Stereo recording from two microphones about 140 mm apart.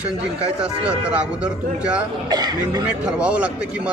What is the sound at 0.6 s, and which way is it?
A man's voice, 10° right (ahead or behind).